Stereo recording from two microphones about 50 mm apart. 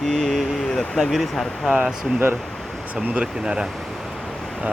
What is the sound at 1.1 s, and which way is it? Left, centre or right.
Speech, centre.